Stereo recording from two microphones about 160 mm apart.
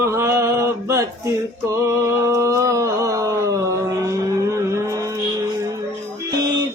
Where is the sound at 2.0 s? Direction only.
20° right (ahead or behind).